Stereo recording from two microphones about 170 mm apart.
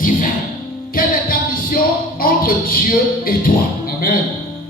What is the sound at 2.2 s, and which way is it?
Speech, 60° left (ahead or behind).